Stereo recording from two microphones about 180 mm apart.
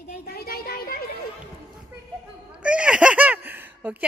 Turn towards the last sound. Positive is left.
turn(degrees=-10)  # may be behind; listen again after turning